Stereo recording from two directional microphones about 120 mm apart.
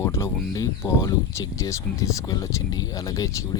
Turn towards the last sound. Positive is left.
turn(degrees=30)  # may be behind; listen again after turning